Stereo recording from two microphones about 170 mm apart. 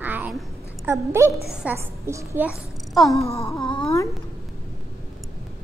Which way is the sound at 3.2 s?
15° left (ahead or behind).